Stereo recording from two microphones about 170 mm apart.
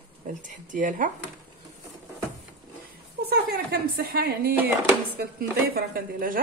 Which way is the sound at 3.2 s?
65° right (ahead or behind).